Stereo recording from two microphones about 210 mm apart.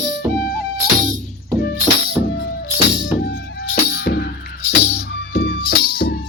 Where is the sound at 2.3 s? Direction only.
55° left (ahead or behind).